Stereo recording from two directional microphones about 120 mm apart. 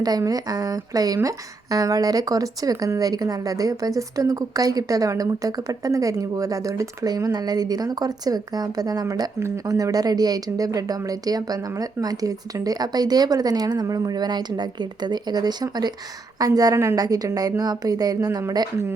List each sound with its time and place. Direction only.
0.0 s speech: 30° right (ahead or behind)